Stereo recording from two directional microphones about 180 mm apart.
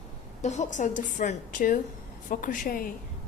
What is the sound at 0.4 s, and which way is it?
A woman's voice, 40° left (ahead or behind).